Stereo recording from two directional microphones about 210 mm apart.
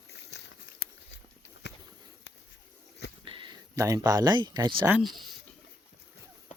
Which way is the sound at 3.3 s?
25° right (ahead or behind).